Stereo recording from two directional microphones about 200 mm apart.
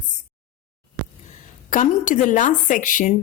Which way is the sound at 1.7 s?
40° left (ahead or behind).